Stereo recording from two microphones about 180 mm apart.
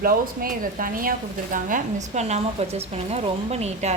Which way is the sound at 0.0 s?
50° right (ahead or behind).